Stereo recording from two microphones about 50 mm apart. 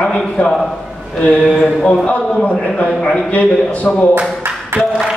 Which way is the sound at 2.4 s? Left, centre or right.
Left.